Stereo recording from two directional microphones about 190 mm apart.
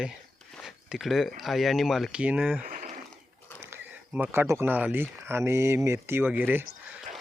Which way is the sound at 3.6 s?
10° right (ahead or behind).